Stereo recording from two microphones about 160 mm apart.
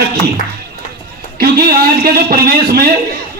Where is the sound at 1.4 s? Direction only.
70° right (ahead or behind).